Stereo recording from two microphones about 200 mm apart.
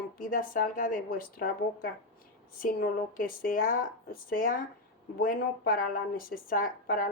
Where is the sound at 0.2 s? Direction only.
45° left (ahead or behind).